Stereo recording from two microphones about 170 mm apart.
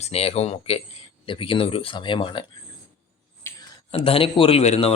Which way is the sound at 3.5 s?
15° left (ahead or behind).